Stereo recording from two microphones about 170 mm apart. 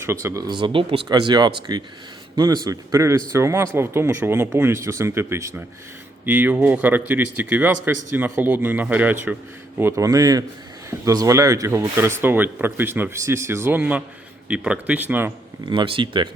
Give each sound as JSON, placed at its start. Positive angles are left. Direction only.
{"t": 0.0, "sound": "speech", "side_deg": -15}
{"t": 15.6, "sound": "speech", "side_deg": -30}